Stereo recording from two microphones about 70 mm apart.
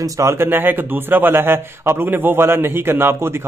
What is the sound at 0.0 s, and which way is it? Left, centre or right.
Speech, right.